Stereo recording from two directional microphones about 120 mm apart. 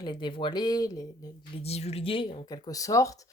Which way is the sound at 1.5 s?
60° left (ahead or behind).